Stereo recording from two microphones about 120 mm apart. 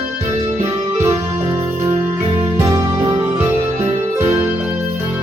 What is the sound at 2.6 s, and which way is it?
Music, 30° right (ahead or behind).